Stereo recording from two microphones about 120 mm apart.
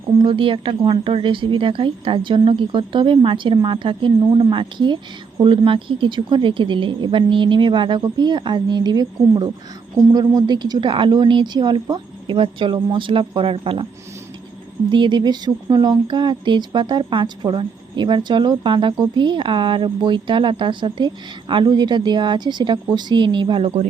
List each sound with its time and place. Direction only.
0.2 s speech: 45° right (ahead or behind)
14.8 s speech: 40° right (ahead or behind)